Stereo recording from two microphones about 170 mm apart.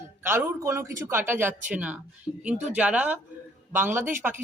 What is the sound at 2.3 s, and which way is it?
Speech, 15° left (ahead or behind).